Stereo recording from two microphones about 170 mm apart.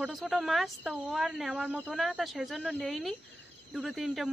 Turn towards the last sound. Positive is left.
turn(degrees=0)  # may be behind; listen again after turning